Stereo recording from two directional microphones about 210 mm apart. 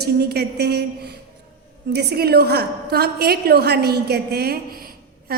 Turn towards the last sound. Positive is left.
turn(degrees=-45)  # may be behind; listen again after turning